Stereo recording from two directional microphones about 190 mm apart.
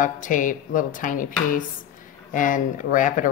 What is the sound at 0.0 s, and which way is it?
Speech, 45° left (ahead or behind).